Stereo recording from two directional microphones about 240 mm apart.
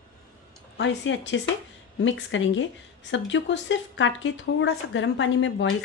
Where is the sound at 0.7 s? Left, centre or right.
Left.